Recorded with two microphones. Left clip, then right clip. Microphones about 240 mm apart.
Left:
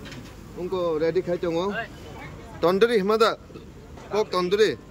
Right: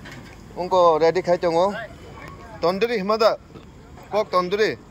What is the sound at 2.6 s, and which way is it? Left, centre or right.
Speech, centre.